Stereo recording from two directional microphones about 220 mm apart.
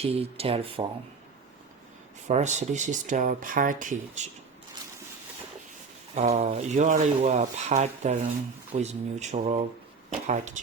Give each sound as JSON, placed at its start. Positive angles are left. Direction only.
{"t": 0.0, "sound": "speech", "side_deg": -25}
{"t": 2.2, "sound": "speech", "side_deg": -30}
{"t": 6.1, "sound": "speech", "side_deg": -30}